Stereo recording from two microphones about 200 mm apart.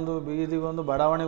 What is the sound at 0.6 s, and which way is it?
Speech, 30° right (ahead or behind).